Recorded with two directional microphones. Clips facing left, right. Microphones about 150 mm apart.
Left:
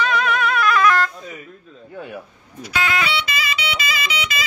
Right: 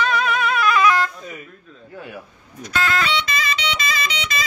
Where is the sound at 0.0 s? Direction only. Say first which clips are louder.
Left 1 dB; centre (ahead or behind).